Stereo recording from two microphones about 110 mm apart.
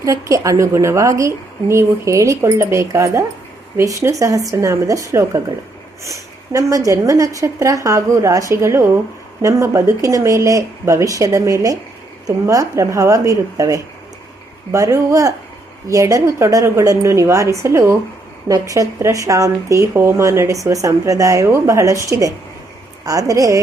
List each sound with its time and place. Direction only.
0.0 s a woman's voice: 30° right (ahead or behind)
23.0 s a woman's voice: 30° right (ahead or behind)